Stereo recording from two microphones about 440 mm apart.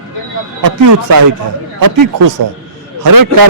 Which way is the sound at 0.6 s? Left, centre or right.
Right.